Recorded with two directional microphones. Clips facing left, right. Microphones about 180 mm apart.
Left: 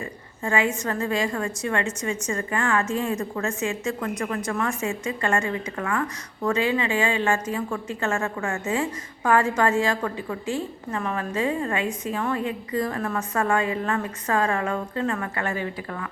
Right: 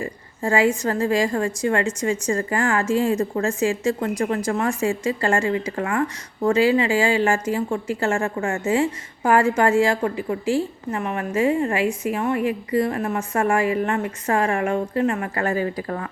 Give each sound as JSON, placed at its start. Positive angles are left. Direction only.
{"t": 0.0, "sound": "a sound", "side_deg": -35}
{"t": 0.8, "sound": "a woman's voice", "side_deg": -30}
{"t": 15.4, "sound": "speech", "side_deg": -35}